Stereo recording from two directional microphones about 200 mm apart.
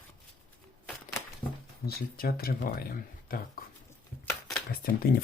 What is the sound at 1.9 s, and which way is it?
Speech, 50° left (ahead or behind).